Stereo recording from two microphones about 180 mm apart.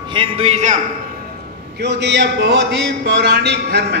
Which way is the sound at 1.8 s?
75° right (ahead or behind).